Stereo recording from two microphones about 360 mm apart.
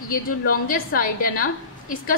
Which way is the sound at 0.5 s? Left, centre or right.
Left.